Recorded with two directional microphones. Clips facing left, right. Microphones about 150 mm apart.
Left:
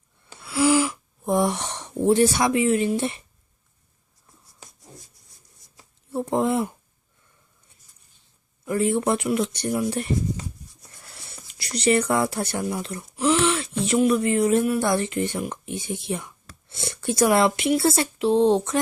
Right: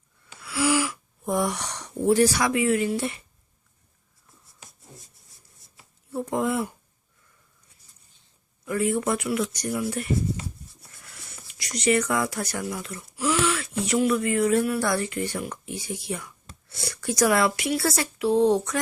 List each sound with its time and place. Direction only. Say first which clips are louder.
0.3 s speech: left 4 dB; 25° left (ahead or behind)
6.1 s speech: left 3 dB; 25° left (ahead or behind)
8.6 s speech: left 3 dB; 30° left (ahead or behind)
11.0 s speech: left 2 dB; 30° left (ahead or behind)